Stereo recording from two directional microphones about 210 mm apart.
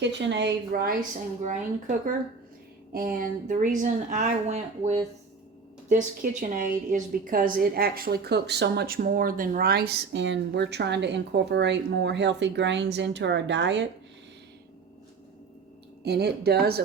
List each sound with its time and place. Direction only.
0.0 s a woman's voice: 55° right (ahead or behind)
2.9 s a woman's voice: 45° right (ahead or behind)
16.0 s a woman's voice: 50° right (ahead or behind)